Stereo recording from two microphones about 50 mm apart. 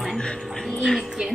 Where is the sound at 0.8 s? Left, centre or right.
Centre.